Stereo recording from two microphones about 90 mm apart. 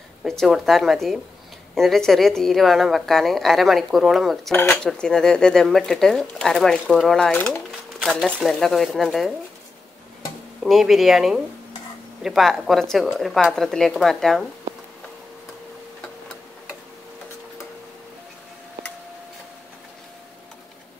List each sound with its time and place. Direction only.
0.2 s a woman's voice: 5° left (ahead or behind)
10.6 s a woman's voice: centre (ahead or behind)